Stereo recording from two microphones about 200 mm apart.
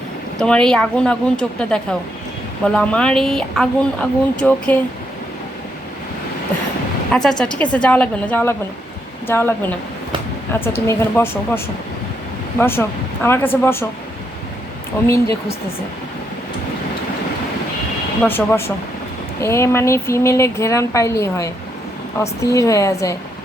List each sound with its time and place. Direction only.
0.3 s a woman's voice: 5° left (ahead or behind)
7.1 s a woman's voice: 5° left (ahead or behind)
15.0 s speech: 15° left (ahead or behind)
18.2 s speech: 10° left (ahead or behind)